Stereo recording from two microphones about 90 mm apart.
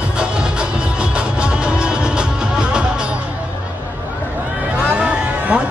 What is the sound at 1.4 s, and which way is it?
Music, 10° right (ahead or behind).